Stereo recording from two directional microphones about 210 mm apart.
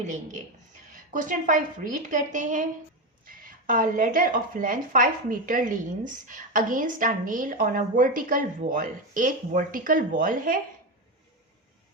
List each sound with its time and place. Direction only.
0.0 s speech: 35° right (ahead or behind)